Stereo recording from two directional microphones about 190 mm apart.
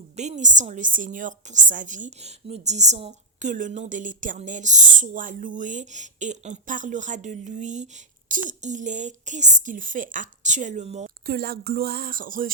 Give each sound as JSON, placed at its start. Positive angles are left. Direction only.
{"t": 0.2, "sound": "a woman's voice", "side_deg": -40}
{"t": 11.3, "sound": "speech", "side_deg": -55}